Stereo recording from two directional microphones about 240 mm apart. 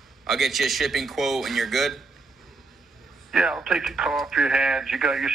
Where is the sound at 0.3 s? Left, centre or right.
Centre.